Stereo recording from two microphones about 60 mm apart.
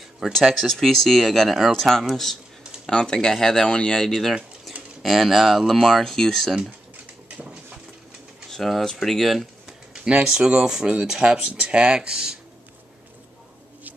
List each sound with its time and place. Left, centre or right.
0.2 s speech: centre
7.2 s a sound: right
8.5 s speech: centre
10.0 s speech: centre